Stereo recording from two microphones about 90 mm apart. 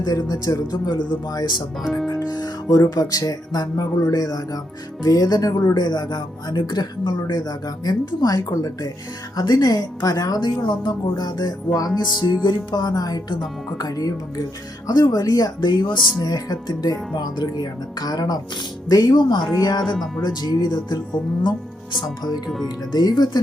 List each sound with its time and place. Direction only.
0.0 s speech: 45° left (ahead or behind)
1.8 s speech: centre (ahead or behind)
2.0 s speech: 50° left (ahead or behind)
22.4 s speech: centre (ahead or behind)
22.9 s speech: 50° left (ahead or behind)